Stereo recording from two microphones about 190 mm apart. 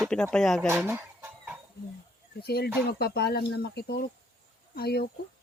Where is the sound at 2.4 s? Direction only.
55° left (ahead or behind).